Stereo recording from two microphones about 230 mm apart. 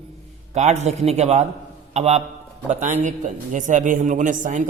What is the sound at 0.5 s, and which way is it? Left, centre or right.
A man's voice, right.